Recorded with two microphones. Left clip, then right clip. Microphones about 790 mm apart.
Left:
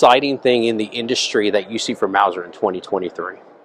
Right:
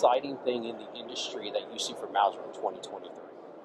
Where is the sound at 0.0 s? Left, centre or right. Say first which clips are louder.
Left 13 dB; left.